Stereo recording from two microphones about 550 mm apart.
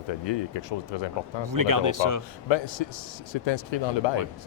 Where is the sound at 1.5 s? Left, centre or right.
Right.